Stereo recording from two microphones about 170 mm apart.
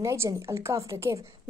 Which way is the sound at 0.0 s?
15° right (ahead or behind).